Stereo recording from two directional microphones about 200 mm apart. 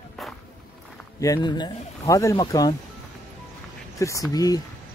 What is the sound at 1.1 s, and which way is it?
Speech, 15° left (ahead or behind).